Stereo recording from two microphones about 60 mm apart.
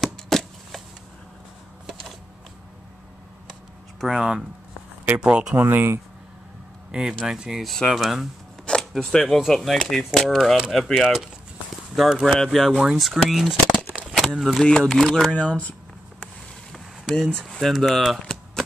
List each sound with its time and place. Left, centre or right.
0.0 s a sound: centre
4.1 s speech: centre
5.6 s speech: right
6.9 s speech: centre
7.7 s speech: centre
8.0 s speech: centre
8.9 s speech: centre
11.7 s walk: centre
12.1 s speech: centre
14.6 s speech: centre
15.3 s speech: left
16.7 s speech: centre